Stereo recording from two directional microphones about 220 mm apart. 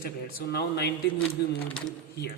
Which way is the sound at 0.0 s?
45° left (ahead or behind).